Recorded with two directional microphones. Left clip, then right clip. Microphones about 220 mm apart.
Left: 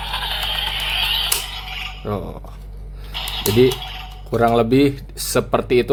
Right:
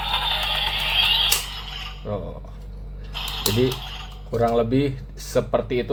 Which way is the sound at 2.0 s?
45° left (ahead or behind).